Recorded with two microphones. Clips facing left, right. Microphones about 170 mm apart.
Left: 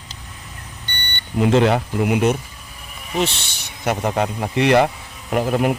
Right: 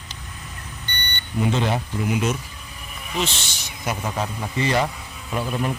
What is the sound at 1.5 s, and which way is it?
Speech, 75° left (ahead or behind).